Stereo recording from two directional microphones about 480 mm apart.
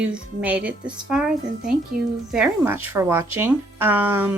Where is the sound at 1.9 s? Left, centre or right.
Centre.